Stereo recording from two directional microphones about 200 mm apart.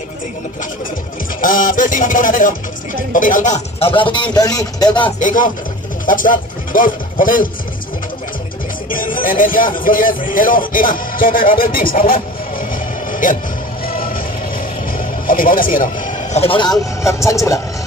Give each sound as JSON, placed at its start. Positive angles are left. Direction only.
{"t": 1.4, "sound": "a sound", "side_deg": 40}
{"t": 3.1, "sound": "speech", "side_deg": 40}
{"t": 5.2, "sound": "a sound", "side_deg": 40}
{"t": 6.0, "sound": "speech", "side_deg": 40}
{"t": 8.9, "sound": "music", "side_deg": 45}
{"t": 9.8, "sound": "speech", "side_deg": 45}
{"t": 13.1, "sound": "music", "side_deg": 40}
{"t": 13.8, "sound": "vehicle", "side_deg": 45}
{"t": 14.9, "sound": "speech", "side_deg": 45}